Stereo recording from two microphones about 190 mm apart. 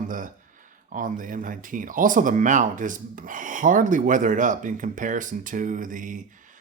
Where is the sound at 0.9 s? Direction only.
45° right (ahead or behind).